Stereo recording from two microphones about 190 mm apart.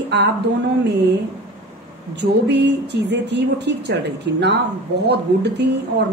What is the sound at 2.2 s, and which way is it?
Speech, 65° right (ahead or behind).